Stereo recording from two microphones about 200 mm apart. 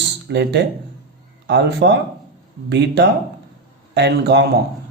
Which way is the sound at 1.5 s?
60° right (ahead or behind).